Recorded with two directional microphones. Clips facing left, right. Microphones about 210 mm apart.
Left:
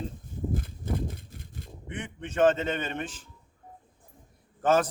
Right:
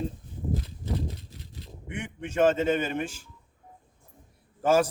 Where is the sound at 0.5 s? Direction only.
50° left (ahead or behind).